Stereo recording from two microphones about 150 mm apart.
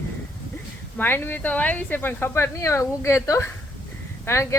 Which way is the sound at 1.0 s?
15° left (ahead or behind).